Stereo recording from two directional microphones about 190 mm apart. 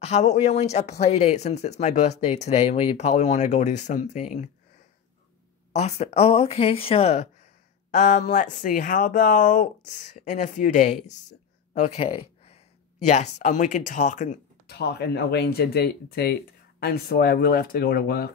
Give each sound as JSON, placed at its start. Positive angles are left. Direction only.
{"t": 0.0, "sound": "speech", "side_deg": 35}
{"t": 5.7, "sound": "speech", "side_deg": 35}
{"t": 14.7, "sound": "speech", "side_deg": 60}